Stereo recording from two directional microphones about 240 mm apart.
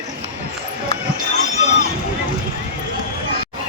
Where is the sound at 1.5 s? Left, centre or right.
Left.